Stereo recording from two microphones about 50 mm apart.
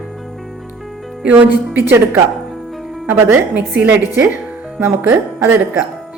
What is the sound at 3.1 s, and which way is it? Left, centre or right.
A woman's voice, right.